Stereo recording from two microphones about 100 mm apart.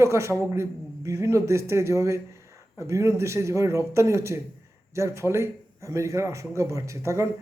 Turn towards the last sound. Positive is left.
turn(degrees=-30)  # may be behind; listen again after turning